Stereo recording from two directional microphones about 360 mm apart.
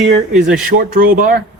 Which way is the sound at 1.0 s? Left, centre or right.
Right.